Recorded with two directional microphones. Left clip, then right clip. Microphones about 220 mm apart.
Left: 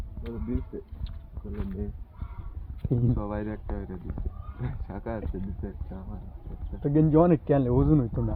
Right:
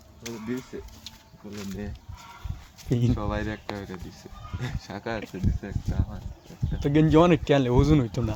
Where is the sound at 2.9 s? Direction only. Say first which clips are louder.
Right 3 dB; 10° right (ahead or behind).